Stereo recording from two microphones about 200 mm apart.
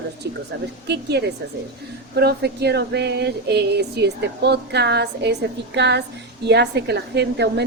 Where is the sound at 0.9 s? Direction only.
55° right (ahead or behind).